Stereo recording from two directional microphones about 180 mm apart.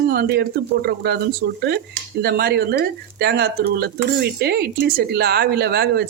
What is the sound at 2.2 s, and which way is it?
Speech, 60° right (ahead or behind).